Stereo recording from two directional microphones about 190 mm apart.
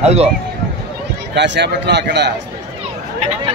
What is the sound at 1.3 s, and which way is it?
A man's voice, 65° right (ahead or behind).